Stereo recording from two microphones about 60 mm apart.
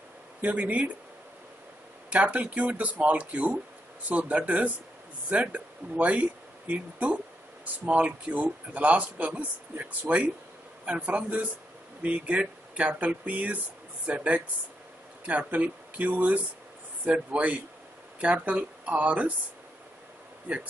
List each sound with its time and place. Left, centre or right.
0.4 s speech: right
2.0 s speech: right
7.6 s speech: right